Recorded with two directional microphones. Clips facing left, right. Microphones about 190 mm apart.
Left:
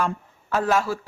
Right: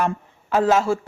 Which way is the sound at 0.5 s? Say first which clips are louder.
Right 4 dB; 20° right (ahead or behind).